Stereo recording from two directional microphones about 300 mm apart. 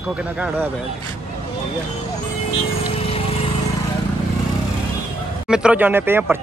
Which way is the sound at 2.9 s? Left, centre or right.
Centre.